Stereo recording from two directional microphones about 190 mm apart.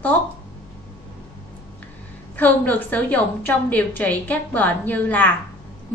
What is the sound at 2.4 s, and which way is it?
A woman's voice, 10° left (ahead or behind).